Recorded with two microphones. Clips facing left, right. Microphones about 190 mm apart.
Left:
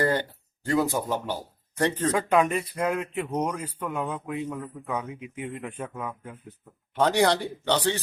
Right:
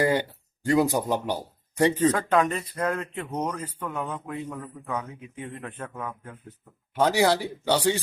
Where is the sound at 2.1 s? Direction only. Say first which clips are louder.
Left 1 dB; 10° left (ahead or behind).